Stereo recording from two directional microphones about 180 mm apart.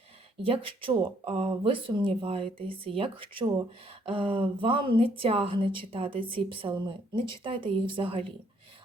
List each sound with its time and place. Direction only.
0.4 s speech: 30° right (ahead or behind)